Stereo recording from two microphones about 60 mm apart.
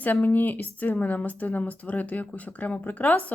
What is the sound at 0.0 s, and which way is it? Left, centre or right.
A woman's voice, left.